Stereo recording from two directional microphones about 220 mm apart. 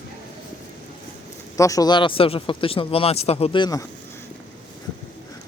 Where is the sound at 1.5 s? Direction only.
15° left (ahead or behind).